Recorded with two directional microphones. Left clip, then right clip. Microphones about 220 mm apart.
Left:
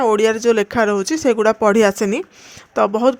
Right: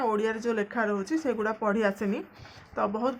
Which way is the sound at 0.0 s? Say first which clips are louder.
Left 13 dB; 40° left (ahead or behind).